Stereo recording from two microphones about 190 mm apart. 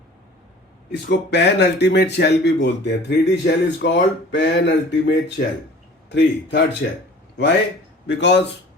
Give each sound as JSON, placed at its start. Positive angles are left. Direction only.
{"t": 0.9, "sound": "a man's voice", "side_deg": 65}
{"t": 8.0, "sound": "speech", "side_deg": 65}